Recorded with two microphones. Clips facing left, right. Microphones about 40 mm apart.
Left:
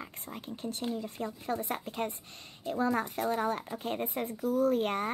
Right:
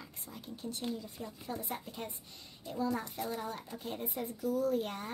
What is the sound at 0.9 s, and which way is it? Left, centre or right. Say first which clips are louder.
Speech: left 7 dB; left.